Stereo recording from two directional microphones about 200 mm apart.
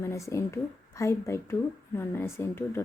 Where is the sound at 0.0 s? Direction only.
15° left (ahead or behind).